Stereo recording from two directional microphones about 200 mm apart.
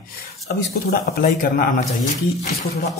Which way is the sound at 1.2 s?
45° left (ahead or behind).